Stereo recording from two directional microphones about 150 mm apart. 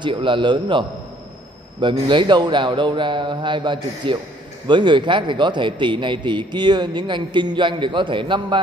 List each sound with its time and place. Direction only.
0.0 s a man's voice: 35° right (ahead or behind)